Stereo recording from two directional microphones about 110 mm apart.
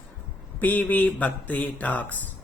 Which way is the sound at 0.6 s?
15° left (ahead or behind).